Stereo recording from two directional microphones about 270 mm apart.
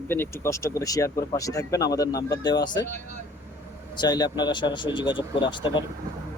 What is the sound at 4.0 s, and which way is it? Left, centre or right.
Speech, centre.